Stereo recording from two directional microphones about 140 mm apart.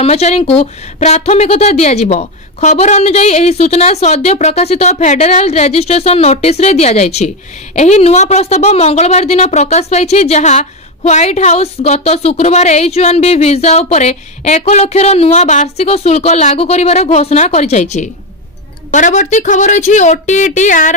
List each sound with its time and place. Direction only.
0.0 s a woman's voice: 50° left (ahead or behind)